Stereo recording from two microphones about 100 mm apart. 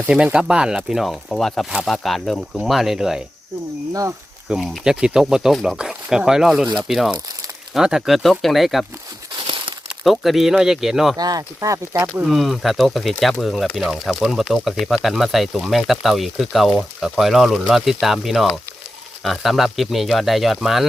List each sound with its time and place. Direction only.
0.1 s speech: 10° right (ahead or behind)
4.4 s speech: 5° right (ahead or behind)
10.0 s speech: centre (ahead or behind)
11.2 s speech: 40° right (ahead or behind)
12.2 s speech: centre (ahead or behind)